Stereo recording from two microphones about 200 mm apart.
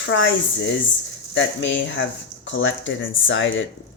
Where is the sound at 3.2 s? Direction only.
70° left (ahead or behind).